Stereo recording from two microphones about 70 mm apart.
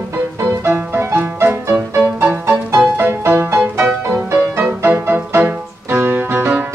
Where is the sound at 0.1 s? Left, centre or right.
Right.